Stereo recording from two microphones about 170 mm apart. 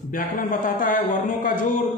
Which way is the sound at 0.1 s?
50° left (ahead or behind).